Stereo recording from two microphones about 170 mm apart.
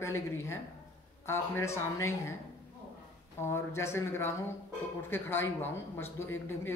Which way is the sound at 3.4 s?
15° left (ahead or behind).